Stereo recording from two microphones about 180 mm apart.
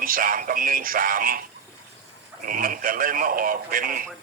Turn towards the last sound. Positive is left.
turn(degrees=-50)  # may be behind; listen again after turning